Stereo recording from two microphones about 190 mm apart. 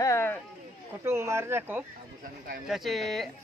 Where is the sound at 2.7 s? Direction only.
Centre (ahead or behind).